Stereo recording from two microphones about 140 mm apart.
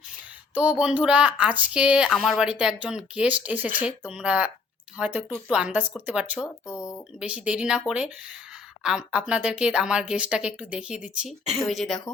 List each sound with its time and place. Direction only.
0.5 s speech: 10° right (ahead or behind)
6.7 s speech: 20° left (ahead or behind)
7.2 s speech: 5° right (ahead or behind)